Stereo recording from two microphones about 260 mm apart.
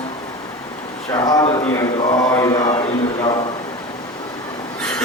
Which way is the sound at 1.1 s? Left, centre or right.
Centre.